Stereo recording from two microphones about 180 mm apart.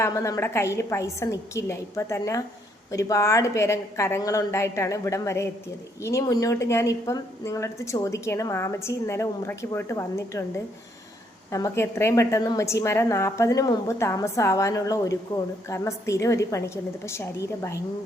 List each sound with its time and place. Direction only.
0.0 s a woman's voice: 15° left (ahead or behind)
11.5 s a woman's voice: 15° left (ahead or behind)